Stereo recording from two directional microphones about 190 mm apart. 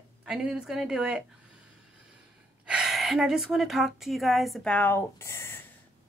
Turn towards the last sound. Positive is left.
turn(degrees=15)  # may be behind; listen again after turning